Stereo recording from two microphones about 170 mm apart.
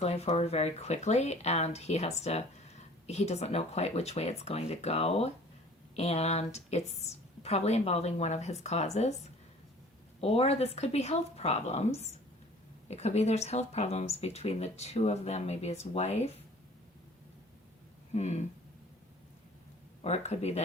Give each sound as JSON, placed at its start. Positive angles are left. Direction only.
{"t": 0.0, "sound": "speech", "side_deg": 35}
{"t": 10.2, "sound": "speech", "side_deg": 35}
{"t": 12.9, "sound": "speech", "side_deg": 40}
{"t": 18.1, "sound": "speech", "side_deg": 40}
{"t": 20.0, "sound": "speech", "side_deg": 40}